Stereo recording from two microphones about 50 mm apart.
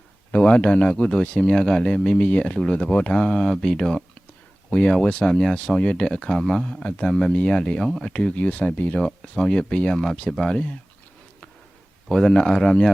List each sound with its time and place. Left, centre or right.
0.3 s speech: left
1.2 s speech: left
1.5 s speech: centre
2.6 s speech: centre
5.0 s speech: centre
8.3 s speech: left
9.3 s speech: centre
12.0 s speech: centre